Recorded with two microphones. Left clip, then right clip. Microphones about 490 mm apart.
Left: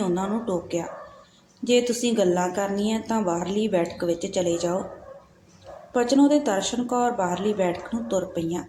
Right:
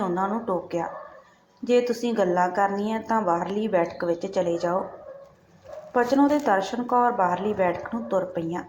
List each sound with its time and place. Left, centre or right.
0.0 s a woman's voice: left
5.9 s a woman's voice: left